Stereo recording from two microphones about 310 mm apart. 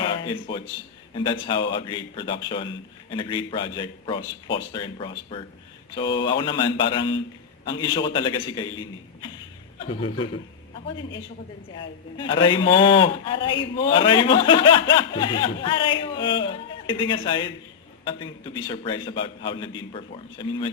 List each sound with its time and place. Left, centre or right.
0.0 s a sound: centre
1.1 s a man's voice: centre
11.8 s a man's voice: centre